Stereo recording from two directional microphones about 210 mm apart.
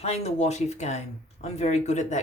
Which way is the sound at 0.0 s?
30° left (ahead or behind).